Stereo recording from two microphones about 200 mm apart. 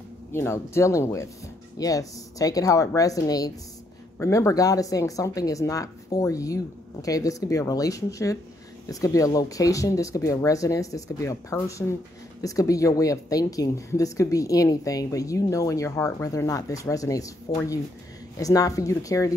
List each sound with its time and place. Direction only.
0.3 s a woman's voice: 10° left (ahead or behind)